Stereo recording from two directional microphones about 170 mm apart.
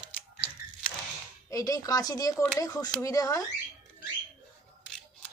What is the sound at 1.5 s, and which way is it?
Speech, 20° left (ahead or behind).